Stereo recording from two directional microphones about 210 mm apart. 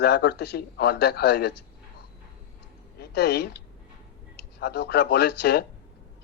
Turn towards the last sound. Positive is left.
turn(degrees=50)  # may be behind; listen again after turning